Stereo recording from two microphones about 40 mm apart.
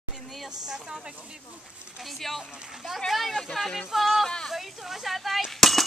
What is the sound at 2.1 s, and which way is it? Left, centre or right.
Speech, centre.